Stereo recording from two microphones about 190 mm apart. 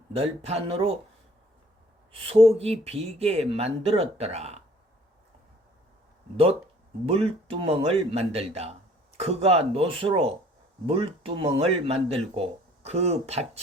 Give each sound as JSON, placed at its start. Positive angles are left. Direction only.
{"t": 0.1, "sound": "speech", "side_deg": -30}
{"t": 2.2, "sound": "speech", "side_deg": -30}
{"t": 6.3, "sound": "speech", "side_deg": -30}